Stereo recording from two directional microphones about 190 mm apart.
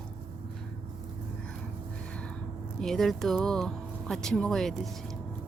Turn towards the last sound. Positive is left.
turn(degrees=0)  # may be behind; listen again after turning